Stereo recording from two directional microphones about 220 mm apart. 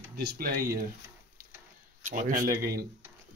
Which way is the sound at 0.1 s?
45° right (ahead or behind).